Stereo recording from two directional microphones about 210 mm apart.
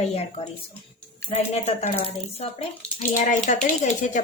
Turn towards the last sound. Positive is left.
turn(degrees=35)  # may be behind; listen again after turning